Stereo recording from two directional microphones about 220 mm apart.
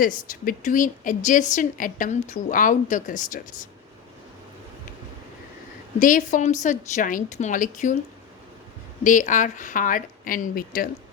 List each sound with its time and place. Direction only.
0.0 s speech: 40° left (ahead or behind)
6.0 s speech: 35° left (ahead or behind)
9.0 s speech: 35° left (ahead or behind)